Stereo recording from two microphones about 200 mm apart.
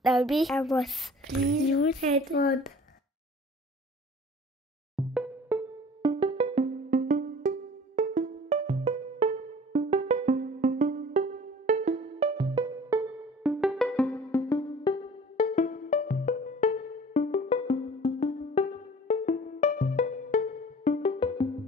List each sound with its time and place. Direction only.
0.0 s a woman's voice: centre (ahead or behind)
2.0 s a woman's voice: 35° right (ahead or behind)
4.9 s music: 5° right (ahead or behind)
6.0 s music: 25° right (ahead or behind)
13.4 s music: 5° right (ahead or behind); by 15.4 s 20° left (ahead or behind)
15.4 s music: 35° left (ahead or behind)